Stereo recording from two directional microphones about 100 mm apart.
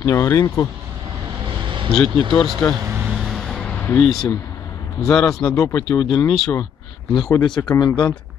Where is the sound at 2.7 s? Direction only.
25° right (ahead or behind).